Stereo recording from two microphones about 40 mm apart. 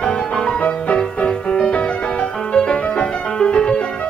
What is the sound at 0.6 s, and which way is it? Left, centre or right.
Music, left.